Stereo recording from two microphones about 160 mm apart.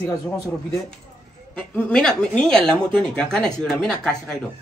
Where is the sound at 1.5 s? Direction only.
5° left (ahead or behind).